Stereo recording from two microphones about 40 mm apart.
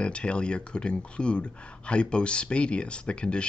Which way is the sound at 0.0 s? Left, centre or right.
Left.